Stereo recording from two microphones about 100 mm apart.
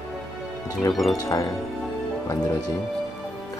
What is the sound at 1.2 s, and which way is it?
Speech, 35° left (ahead or behind).